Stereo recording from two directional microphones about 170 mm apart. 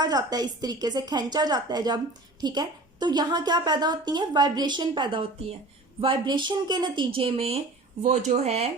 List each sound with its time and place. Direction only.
0.0 s a woman's voice: 25° right (ahead or behind); by 8.7 s 40° right (ahead or behind)